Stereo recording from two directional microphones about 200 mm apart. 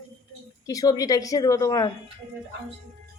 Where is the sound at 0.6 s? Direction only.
15° left (ahead or behind).